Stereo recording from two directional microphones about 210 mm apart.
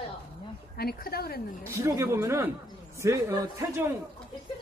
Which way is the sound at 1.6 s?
15° right (ahead or behind).